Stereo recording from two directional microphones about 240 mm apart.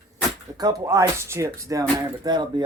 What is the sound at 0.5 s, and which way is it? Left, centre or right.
Speech, centre.